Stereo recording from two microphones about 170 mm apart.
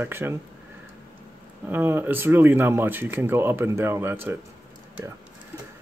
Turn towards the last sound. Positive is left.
turn(degrees=-15)  # may be behind; listen again after turning